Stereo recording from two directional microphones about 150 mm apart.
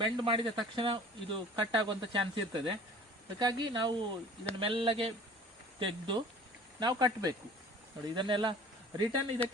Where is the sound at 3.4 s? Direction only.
30° right (ahead or behind).